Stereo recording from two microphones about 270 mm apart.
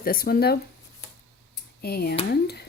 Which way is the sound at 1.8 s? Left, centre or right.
Left.